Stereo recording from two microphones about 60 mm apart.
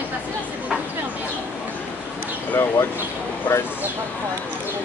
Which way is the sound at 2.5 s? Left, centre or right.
Left.